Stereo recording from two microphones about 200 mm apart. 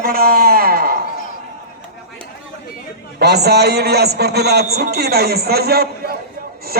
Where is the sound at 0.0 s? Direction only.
50° right (ahead or behind).